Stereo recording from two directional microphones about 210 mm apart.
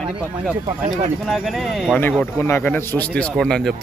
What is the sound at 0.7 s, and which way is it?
Speech, 35° right (ahead or behind).